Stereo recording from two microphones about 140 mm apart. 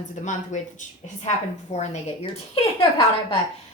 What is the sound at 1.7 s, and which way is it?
A woman's voice, 55° left (ahead or behind).